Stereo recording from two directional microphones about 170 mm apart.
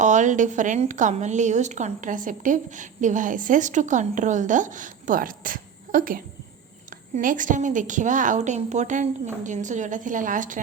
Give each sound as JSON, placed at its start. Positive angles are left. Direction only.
{"t": 0.0, "sound": "a woman's voice", "side_deg": -45}